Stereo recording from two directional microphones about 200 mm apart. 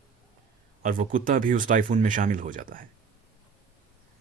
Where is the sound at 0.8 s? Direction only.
40° right (ahead or behind).